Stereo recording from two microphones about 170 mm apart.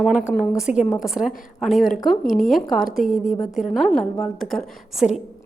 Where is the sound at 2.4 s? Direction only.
Centre (ahead or behind).